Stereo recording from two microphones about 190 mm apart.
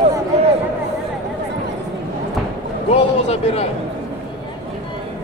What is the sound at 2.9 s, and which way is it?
Speech, 35° left (ahead or behind).